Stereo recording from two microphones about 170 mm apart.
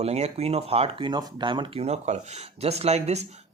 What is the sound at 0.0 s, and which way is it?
Speech, 40° right (ahead or behind).